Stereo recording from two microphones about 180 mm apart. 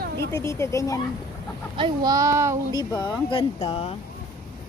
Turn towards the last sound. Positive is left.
turn(degrees=35)  # may be behind; listen again after turning